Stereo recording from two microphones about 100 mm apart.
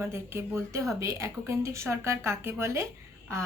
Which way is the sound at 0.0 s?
25° right (ahead or behind).